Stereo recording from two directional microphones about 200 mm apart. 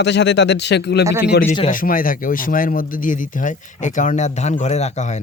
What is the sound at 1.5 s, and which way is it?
Speech, 40° left (ahead or behind).